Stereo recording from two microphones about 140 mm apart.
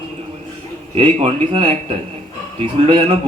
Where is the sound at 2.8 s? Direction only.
40° right (ahead or behind).